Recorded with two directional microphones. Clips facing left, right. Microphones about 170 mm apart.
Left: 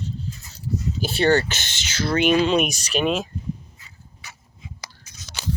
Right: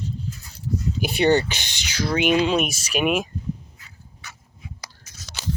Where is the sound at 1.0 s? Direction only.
15° right (ahead or behind).